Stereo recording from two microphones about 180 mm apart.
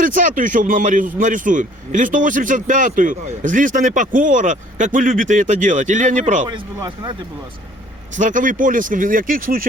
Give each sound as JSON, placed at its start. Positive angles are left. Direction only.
{"t": 0.0, "sound": "a man's voice", "side_deg": -45}
{"t": 6.5, "sound": "speech", "side_deg": -20}
{"t": 8.1, "sound": "a man's voice", "side_deg": -45}